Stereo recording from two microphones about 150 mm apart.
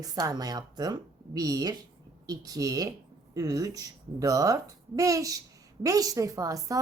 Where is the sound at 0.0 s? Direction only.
25° right (ahead or behind).